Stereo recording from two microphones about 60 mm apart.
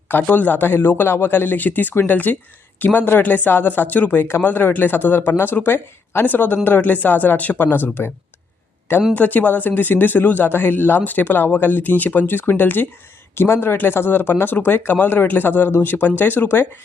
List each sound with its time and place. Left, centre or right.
0.1 s a man's voice: left
9.1 s a man's voice: left